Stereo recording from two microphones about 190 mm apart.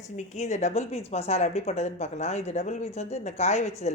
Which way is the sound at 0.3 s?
40° left (ahead or behind).